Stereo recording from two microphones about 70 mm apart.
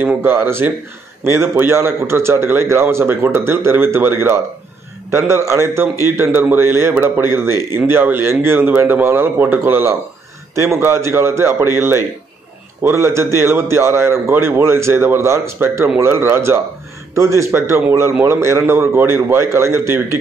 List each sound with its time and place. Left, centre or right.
0.0 s a man's voice: right
5.5 s a man's voice: right